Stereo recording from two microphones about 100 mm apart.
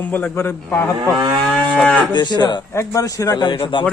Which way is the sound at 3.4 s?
55° left (ahead or behind).